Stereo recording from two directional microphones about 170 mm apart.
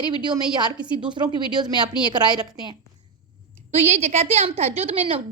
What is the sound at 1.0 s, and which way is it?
Speech, 25° right (ahead or behind).